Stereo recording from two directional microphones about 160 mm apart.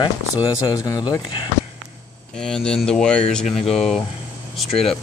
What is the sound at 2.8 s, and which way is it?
Speech, 5° left (ahead or behind).